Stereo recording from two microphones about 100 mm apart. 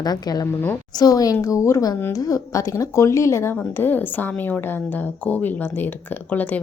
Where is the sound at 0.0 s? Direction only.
40° left (ahead or behind).